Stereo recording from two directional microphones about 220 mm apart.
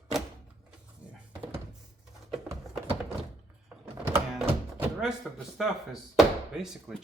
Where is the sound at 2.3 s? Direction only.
5° right (ahead or behind).